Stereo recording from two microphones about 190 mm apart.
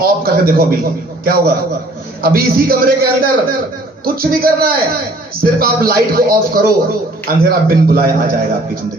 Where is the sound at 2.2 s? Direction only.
50° right (ahead or behind).